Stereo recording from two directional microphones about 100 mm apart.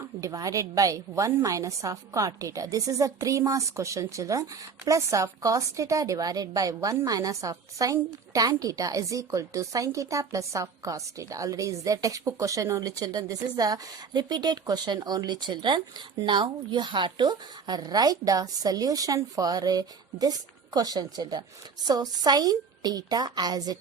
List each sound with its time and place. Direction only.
0.2 s a woman's voice: 35° right (ahead or behind)